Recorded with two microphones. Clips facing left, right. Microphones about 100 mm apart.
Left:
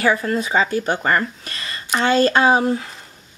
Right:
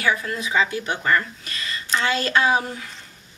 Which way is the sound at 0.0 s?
40° left (ahead or behind).